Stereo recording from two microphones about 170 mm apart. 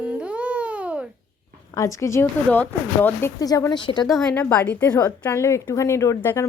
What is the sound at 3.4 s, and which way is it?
Speech, 20° left (ahead or behind).